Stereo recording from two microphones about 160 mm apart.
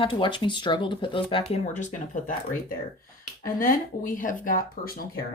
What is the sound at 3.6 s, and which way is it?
Speech, 60° left (ahead or behind).